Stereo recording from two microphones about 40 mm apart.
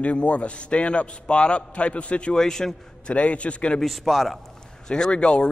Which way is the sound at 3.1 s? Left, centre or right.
Left.